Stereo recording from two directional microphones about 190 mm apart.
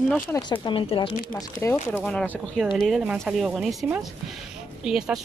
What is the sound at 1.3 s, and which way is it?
Speech, 10° left (ahead or behind).